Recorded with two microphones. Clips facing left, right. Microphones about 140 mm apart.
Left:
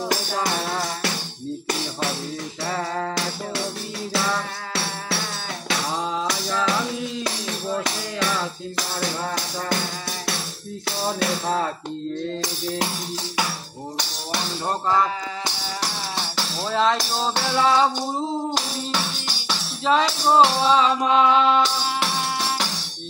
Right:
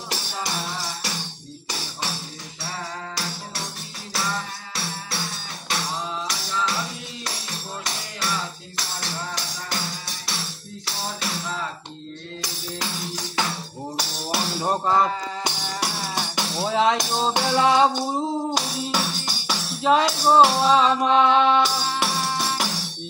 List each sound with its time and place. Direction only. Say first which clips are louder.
0.1 s music: left 2 dB; 55° left (ahead or behind)
7.8 s music: left 5 dB; 55° left (ahead or behind)
10.9 s music: left 7 dB; 55° left (ahead or behind)
13.9 s music: right 2 dB; 5° right (ahead or behind)
21.6 s music: even; 5° right (ahead or behind)